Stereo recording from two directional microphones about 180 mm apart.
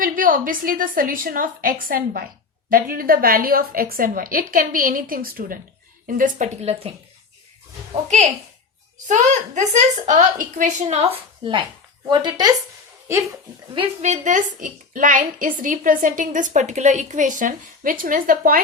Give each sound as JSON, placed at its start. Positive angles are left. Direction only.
{"t": 0.0, "sound": "a woman's voice", "side_deg": -50}
{"t": 8.0, "sound": "a woman's voice", "side_deg": -40}
{"t": 14.0, "sound": "a woman's voice", "side_deg": -40}